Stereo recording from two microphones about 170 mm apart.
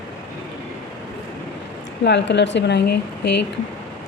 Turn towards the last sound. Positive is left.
turn(degrees=80)